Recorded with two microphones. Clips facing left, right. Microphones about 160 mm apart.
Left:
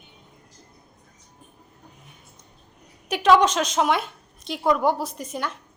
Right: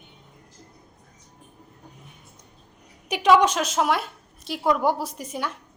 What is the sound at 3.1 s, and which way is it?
A woman's voice, 10° right (ahead or behind).